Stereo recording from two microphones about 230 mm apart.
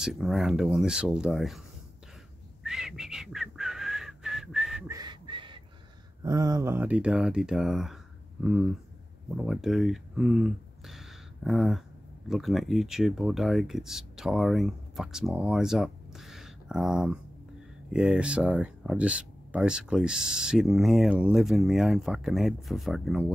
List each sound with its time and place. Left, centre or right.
0.0 s speech: centre
2.6 s whistling: centre
4.8 s whistling: centre
6.2 s speech: centre